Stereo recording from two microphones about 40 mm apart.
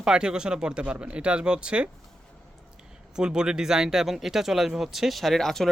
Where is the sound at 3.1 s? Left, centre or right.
Centre.